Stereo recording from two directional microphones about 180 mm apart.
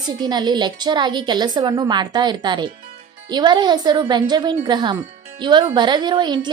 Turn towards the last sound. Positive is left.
turn(degrees=-25)  # may be behind; listen again after turning